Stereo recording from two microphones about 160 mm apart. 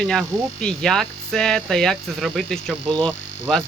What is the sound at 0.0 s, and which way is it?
Speech, centre (ahead or behind).